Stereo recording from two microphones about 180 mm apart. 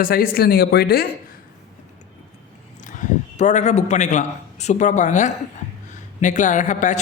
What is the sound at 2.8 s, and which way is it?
A man's voice, 45° left (ahead or behind).